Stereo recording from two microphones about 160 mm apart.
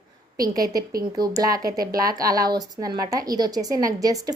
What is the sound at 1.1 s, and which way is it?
Speech, 25° right (ahead or behind).